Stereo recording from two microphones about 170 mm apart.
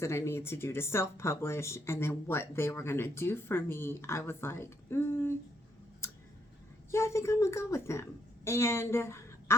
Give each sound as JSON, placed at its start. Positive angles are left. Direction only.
{"t": 0.0, "sound": "speech", "side_deg": 15}
{"t": 6.9, "sound": "a woman's voice", "side_deg": 15}